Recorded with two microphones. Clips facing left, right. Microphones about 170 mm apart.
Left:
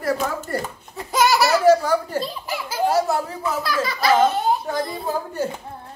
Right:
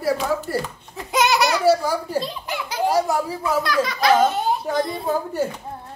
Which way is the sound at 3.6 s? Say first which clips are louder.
Right 2 dB; centre (ahead or behind).